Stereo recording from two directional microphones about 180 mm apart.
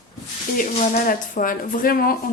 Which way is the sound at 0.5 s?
50° left (ahead or behind).